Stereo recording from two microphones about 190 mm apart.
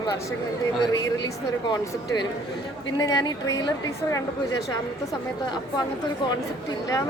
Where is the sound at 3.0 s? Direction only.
20° left (ahead or behind).